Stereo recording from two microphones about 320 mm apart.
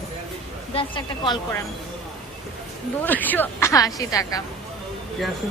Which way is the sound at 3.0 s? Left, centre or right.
Centre.